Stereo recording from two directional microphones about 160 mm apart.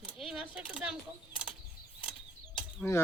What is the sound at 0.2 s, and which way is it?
Coin, 5° right (ahead or behind).